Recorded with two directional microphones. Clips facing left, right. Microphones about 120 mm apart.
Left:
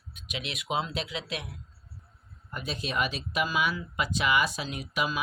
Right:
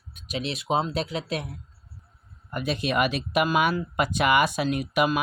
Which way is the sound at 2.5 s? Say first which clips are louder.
Right 7 dB; 70° right (ahead or behind).